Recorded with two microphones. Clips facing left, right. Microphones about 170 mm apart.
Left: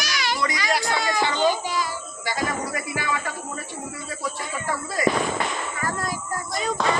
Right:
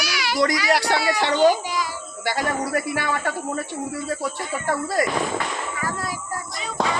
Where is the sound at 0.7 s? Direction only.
75° right (ahead or behind).